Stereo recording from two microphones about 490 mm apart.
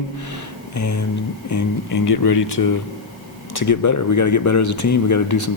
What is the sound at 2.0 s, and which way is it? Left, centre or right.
Speech, left.